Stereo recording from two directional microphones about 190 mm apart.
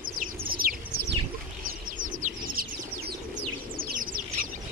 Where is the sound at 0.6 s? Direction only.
50° right (ahead or behind).